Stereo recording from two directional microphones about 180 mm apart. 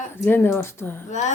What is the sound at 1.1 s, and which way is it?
Speech, 40° left (ahead or behind).